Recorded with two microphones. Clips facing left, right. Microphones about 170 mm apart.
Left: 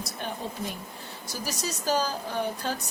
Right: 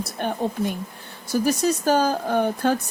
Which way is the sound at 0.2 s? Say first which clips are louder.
Right 10 dB; 60° right (ahead or behind).